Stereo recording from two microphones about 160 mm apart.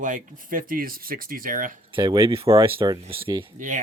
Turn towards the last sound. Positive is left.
turn(degrees=-50)  # may be behind; listen again after turning